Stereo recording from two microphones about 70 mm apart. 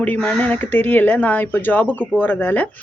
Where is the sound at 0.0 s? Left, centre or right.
Left.